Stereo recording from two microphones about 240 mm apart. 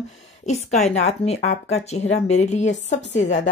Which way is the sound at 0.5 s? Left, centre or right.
Left.